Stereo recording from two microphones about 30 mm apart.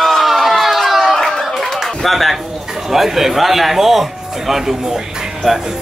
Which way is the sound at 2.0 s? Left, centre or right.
Centre.